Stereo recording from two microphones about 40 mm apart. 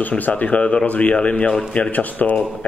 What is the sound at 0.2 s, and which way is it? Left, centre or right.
Speech, left.